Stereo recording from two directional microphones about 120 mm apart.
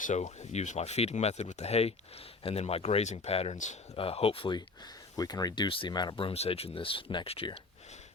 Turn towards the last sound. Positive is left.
turn(degrees=55)  # may be behind; listen again after turning